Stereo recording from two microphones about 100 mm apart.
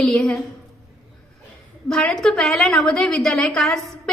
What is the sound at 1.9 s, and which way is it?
A woman's voice, 5° left (ahead or behind).